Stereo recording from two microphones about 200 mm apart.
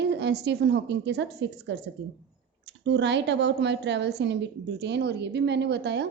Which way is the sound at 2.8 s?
60° right (ahead or behind).